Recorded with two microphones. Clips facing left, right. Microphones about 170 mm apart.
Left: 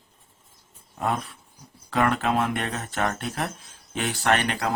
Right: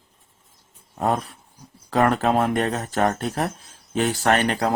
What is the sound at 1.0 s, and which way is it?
Speech, 40° right (ahead or behind).